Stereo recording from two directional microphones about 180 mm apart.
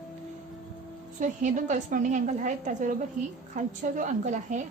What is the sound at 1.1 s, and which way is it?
A woman's voice, 45° right (ahead or behind).